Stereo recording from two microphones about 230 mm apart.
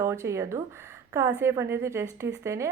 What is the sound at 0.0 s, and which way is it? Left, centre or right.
A woman's voice, centre.